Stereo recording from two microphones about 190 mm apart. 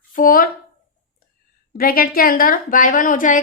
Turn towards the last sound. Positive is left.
turn(degrees=45)  # may be behind; listen again after turning